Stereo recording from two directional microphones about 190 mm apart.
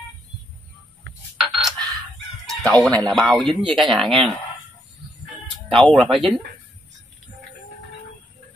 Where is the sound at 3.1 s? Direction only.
Centre (ahead or behind).